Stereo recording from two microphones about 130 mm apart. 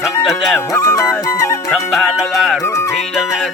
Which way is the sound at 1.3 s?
25° left (ahead or behind).